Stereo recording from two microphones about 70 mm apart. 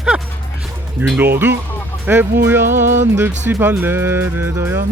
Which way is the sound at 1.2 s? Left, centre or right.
Right.